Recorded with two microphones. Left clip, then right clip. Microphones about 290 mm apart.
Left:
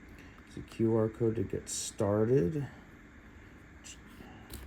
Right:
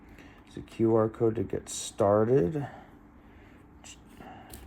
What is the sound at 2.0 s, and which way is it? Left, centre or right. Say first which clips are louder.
Speech: right 7 dB; right.